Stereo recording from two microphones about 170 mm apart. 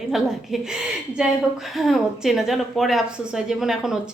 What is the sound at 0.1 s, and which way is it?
A woman's voice, centre (ahead or behind).